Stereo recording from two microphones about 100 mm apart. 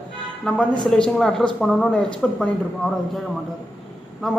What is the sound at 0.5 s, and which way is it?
A man's voice, 5° left (ahead or behind).